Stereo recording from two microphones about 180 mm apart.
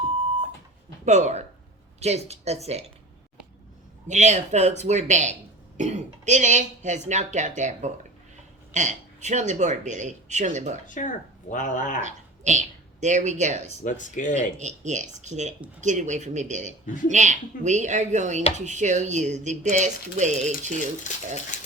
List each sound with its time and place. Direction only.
1.0 s speech: 40° right (ahead or behind)
4.1 s speech: 40° right (ahead or behind)
10.8 s speech: 45° left (ahead or behind)
12.0 s a woman's voice: 40° right (ahead or behind)
13.8 s speech: 45° left (ahead or behind)
14.6 s speech: 40° right (ahead or behind)
16.8 s speech: 45° left (ahead or behind)
17.1 s speech: 40° right (ahead or behind)
21.1 s speech: 45° left (ahead or behind)